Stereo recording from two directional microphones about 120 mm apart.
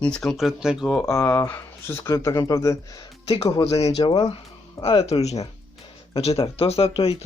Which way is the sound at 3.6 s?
55° left (ahead or behind).